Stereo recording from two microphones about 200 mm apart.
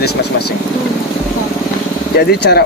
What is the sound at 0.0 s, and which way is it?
Speech, 55° left (ahead or behind).